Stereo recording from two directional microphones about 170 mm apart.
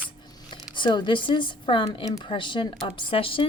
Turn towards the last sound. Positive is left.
turn(degrees=30)  # may be behind; listen again after turning